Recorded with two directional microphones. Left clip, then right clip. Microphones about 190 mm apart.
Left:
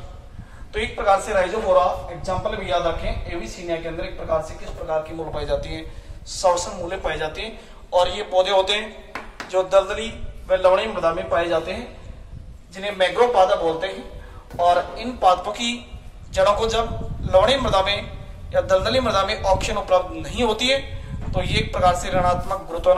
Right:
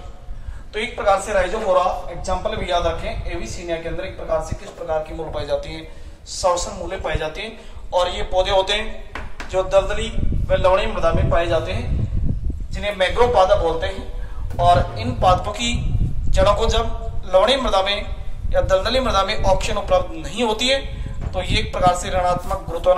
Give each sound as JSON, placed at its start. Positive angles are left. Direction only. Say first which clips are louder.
{"t": 0.7, "sound": "a man's voice", "louder": "right 1 dB", "side_deg": 10}